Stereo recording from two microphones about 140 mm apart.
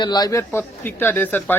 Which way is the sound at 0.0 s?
30° left (ahead or behind).